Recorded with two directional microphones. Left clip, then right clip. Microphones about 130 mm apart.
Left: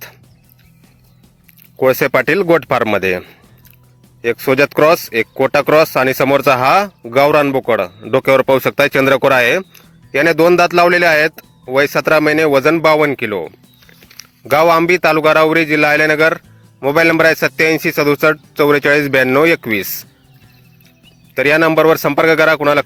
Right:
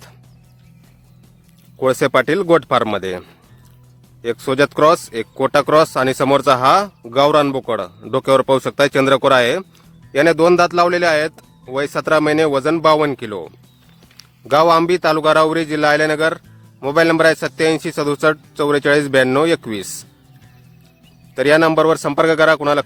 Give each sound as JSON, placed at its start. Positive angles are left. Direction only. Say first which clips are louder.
{"t": 1.8, "sound": "speech", "louder": "left 3 dB", "side_deg": 30}
{"t": 14.5, "sound": "speech", "louder": "left 2 dB", "side_deg": 25}
{"t": 21.3, "sound": "speech", "louder": "left 2 dB", "side_deg": 25}